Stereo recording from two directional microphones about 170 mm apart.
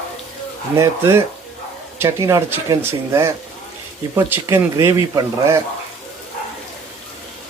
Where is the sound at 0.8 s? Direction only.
15° right (ahead or behind).